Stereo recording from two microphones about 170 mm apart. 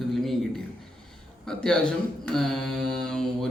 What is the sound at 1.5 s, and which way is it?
Speech, 5° left (ahead or behind).